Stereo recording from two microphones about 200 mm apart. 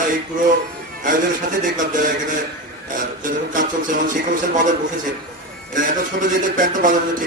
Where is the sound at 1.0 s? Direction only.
40° right (ahead or behind).